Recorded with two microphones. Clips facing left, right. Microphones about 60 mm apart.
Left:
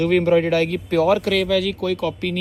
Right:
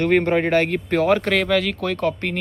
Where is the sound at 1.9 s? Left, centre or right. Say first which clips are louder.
Even; right.